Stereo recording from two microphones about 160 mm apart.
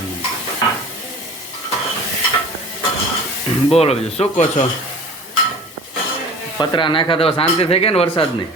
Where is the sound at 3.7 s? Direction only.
40° left (ahead or behind).